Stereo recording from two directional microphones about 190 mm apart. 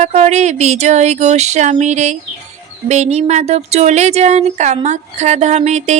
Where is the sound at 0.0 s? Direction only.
35° right (ahead or behind).